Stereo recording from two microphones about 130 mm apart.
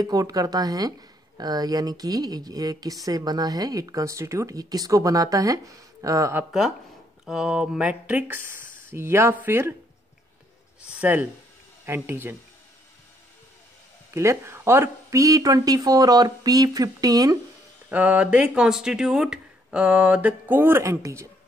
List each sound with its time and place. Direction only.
0.0 s speech: 30° right (ahead or behind)
7.2 s speech: 5° right (ahead or behind)
10.9 s speech: 10° right (ahead or behind)
14.1 s speech: 20° right (ahead or behind)
17.8 s speech: 10° right (ahead or behind)